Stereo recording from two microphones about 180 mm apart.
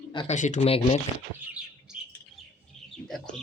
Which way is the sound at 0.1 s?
25° left (ahead or behind).